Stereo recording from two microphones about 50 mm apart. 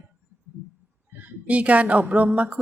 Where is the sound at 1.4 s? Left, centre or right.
Right.